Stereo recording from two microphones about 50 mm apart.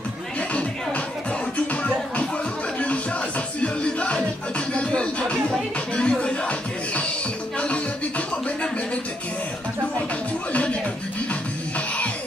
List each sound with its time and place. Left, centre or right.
0.5 s music: left
3.6 s music: left
10.5 s music: left